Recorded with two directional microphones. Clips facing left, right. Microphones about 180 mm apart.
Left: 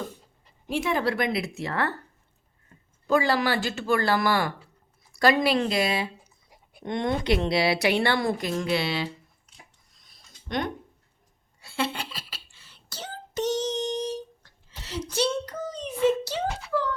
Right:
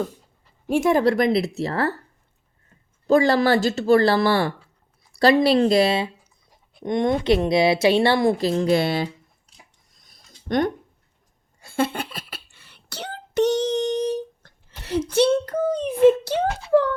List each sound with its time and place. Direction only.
0.7 s speech: 45° right (ahead or behind)
3.1 s speech: 40° right (ahead or behind)
6.8 s a woman's voice: 15° right (ahead or behind)
8.7 s speech: 50° right (ahead or behind)
10.1 s a sound: 45° right (ahead or behind)